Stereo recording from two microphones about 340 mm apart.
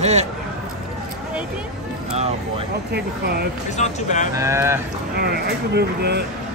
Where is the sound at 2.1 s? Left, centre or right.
Centre.